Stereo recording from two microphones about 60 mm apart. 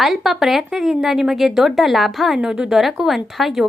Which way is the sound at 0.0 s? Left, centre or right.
Centre.